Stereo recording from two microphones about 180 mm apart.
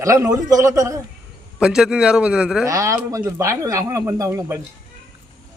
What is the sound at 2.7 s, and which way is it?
A man's voice, 20° right (ahead or behind).